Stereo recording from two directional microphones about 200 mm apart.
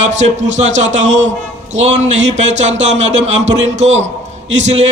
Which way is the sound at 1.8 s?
35° right (ahead or behind).